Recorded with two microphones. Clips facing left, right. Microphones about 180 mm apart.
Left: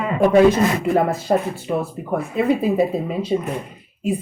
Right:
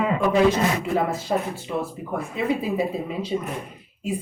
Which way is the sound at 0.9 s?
50° left (ahead or behind).